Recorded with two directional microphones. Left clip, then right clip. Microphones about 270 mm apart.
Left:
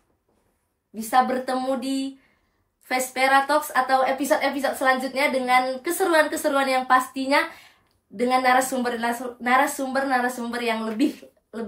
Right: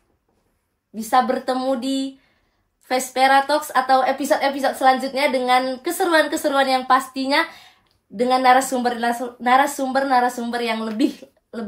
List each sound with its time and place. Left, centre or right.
0.9 s a woman's voice: right